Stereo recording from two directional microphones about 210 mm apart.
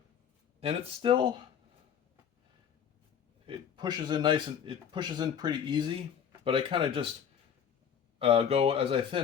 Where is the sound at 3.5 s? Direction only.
20° right (ahead or behind).